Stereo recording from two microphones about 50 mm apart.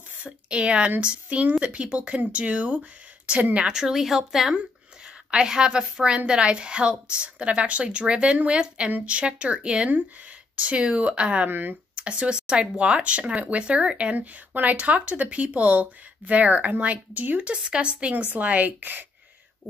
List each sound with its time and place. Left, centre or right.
0.2 s a woman's voice: right
3.5 s a woman's voice: centre
11.4 s speech: right
11.9 s speech: right
17.5 s speech: right